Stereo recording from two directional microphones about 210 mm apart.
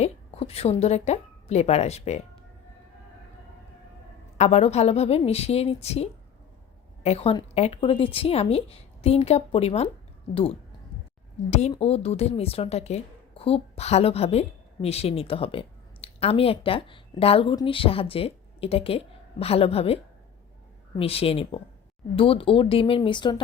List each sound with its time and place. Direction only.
0.0 s a woman's voice: 30° left (ahead or behind)
4.4 s a woman's voice: 30° left (ahead or behind)
11.7 s a woman's voice: 30° left (ahead or behind)